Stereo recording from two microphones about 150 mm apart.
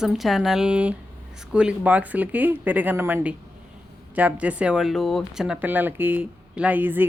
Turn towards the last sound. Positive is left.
turn(degrees=-15)  # may be behind; listen again after turning